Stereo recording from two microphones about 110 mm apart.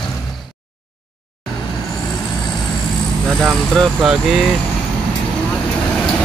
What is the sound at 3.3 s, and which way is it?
Vehicle, 5° left (ahead or behind).